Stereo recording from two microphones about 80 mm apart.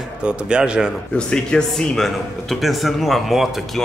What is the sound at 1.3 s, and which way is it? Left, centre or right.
Speech, centre.